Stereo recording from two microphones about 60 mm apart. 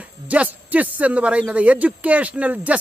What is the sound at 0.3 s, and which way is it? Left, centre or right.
A man's voice, right.